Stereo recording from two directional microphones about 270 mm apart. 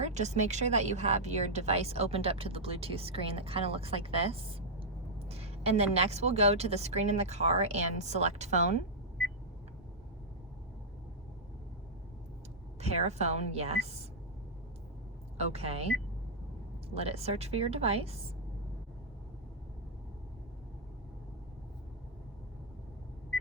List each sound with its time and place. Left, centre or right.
0.0 s speech: right
12.8 s speech: right
15.4 s speech: right